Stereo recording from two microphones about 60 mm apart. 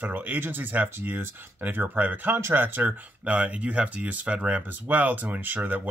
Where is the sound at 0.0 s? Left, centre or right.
Right.